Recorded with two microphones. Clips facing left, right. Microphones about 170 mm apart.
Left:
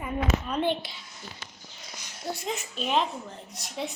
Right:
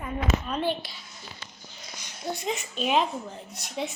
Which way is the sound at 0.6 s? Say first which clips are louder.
Left 1 dB; 20° left (ahead or behind).